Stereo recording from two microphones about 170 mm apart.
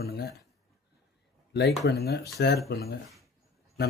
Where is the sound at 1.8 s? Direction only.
65° left (ahead or behind).